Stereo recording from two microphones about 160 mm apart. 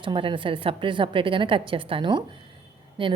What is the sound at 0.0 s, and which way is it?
A woman's voice, 30° right (ahead or behind).